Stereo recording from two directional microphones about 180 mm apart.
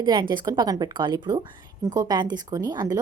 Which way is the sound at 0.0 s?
25° right (ahead or behind).